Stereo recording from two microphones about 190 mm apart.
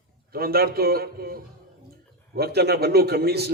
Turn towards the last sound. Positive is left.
turn(degrees=-60)  # may be behind; listen again after turning